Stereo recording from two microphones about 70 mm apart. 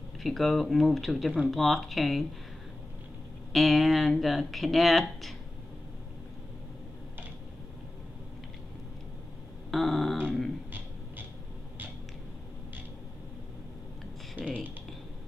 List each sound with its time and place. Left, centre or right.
0.2 s speech: centre
3.5 s speech: centre
9.7 s speech: centre
14.4 s speech: right